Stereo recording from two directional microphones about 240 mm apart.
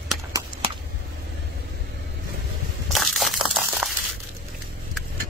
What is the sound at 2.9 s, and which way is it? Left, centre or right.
Crumpling, centre.